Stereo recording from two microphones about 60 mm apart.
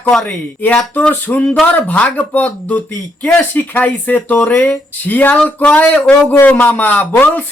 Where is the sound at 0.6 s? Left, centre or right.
Left.